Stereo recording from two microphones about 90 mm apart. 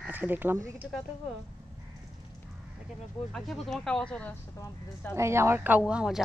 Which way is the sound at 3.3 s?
Centre (ahead or behind).